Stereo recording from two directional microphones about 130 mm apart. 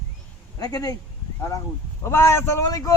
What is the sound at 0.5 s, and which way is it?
Speech, 30° left (ahead or behind).